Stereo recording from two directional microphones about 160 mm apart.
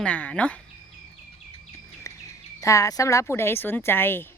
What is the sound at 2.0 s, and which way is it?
Bird, 20° left (ahead or behind).